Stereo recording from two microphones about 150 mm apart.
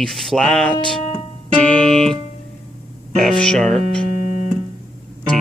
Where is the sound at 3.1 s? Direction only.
5° left (ahead or behind).